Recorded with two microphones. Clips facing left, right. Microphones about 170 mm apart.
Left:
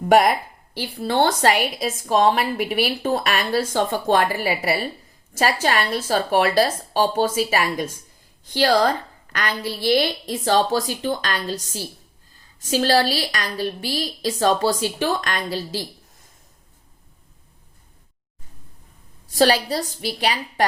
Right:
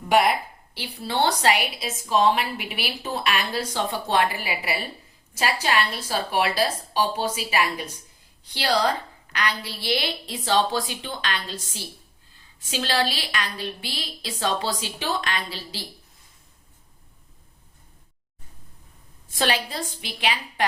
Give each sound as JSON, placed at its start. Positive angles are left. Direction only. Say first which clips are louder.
{"t": 0.0, "sound": "a woman's voice", "louder": "left 4 dB", "side_deg": 45}
{"t": 19.3, "sound": "a woman's voice", "louder": "left 8 dB", "side_deg": 40}